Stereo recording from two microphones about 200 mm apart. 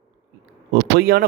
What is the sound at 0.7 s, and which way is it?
Speech, 50° right (ahead or behind).